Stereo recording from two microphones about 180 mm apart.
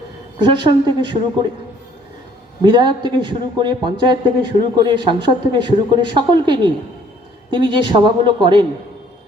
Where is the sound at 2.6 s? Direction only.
25° right (ahead or behind).